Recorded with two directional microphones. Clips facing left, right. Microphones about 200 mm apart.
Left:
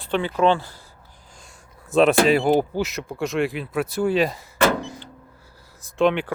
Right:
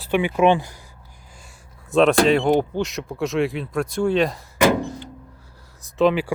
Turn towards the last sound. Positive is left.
turn(degrees=-5)  # may be behind; listen again after turning